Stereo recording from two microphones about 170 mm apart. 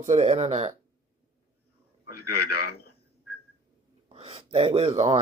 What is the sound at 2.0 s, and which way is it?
Speech, 65° left (ahead or behind).